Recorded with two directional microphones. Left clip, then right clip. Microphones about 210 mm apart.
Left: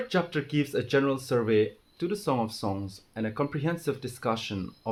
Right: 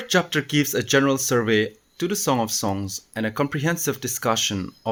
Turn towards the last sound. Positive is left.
turn(degrees=-45)  # may be behind; listen again after turning